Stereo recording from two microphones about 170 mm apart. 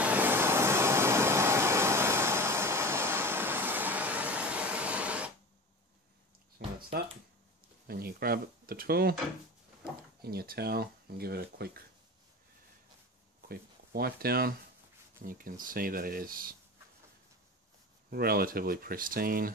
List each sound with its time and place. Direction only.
0.0 s vehicle: 10° right (ahead or behind)
6.6 s a sound: 65° right (ahead or behind)
7.8 s speech: 65° right (ahead or behind)
10.2 s speech: 65° right (ahead or behind)
13.5 s speech: 65° right (ahead or behind)
18.1 s speech: 60° right (ahead or behind)